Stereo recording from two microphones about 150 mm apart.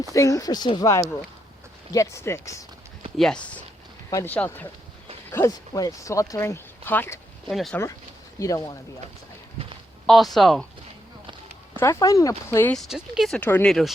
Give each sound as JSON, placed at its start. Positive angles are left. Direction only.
{"t": 0.1, "sound": "speech", "side_deg": 20}
{"t": 3.2, "sound": "speech", "side_deg": 5}
{"t": 7.4, "sound": "speech", "side_deg": 0}
{"t": 8.4, "sound": "speech", "side_deg": 20}
{"t": 10.1, "sound": "speech", "side_deg": 0}
{"t": 11.8, "sound": "speech", "side_deg": 20}
{"t": 12.7, "sound": "speech", "side_deg": 0}